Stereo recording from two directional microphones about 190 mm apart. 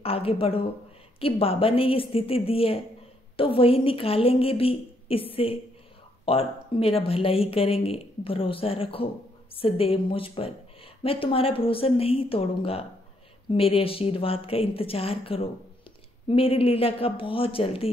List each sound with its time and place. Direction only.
0.0 s speech: 30° left (ahead or behind)